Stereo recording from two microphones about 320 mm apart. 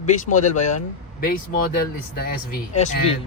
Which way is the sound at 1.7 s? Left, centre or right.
Left.